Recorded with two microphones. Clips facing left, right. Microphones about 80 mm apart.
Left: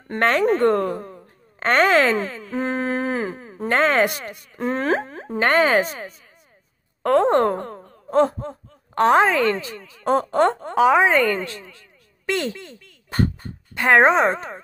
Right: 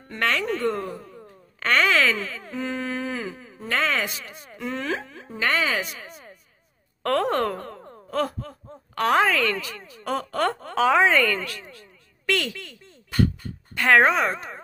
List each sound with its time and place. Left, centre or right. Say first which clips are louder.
0.1 s speech: left 7 dB; left
4.6 s speech: left 7 dB; left
7.0 s speech: left 6 dB; left
13.1 s a sound: even; left
13.7 s speech: left 3 dB; left